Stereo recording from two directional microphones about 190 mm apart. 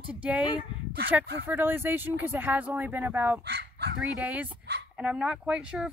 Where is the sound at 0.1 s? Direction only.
5° right (ahead or behind).